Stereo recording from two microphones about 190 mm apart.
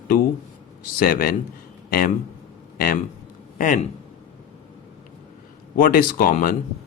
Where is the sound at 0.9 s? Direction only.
50° left (ahead or behind).